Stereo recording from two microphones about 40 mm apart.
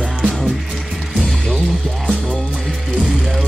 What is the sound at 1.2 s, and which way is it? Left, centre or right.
Music, centre.